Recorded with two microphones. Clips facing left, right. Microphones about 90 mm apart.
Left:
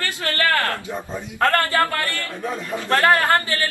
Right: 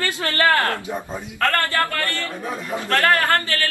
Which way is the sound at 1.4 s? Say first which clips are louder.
Left 2 dB; 20° left (ahead or behind).